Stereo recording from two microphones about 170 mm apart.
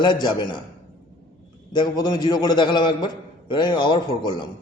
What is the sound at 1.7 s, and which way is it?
A man's voice, 25° left (ahead or behind).